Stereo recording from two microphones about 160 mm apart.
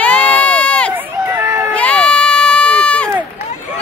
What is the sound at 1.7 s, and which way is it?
Run, 5° left (ahead or behind).